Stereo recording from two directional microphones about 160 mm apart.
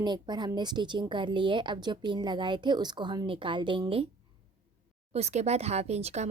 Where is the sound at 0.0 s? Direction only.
25° right (ahead or behind).